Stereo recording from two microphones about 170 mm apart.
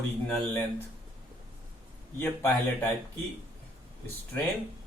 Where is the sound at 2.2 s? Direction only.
10° left (ahead or behind).